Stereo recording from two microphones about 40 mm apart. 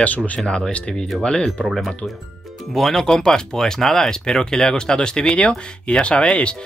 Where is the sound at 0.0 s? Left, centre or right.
Left.